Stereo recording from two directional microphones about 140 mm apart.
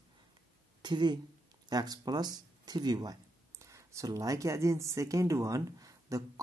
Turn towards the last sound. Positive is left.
turn(degrees=-25)  # may be behind; listen again after turning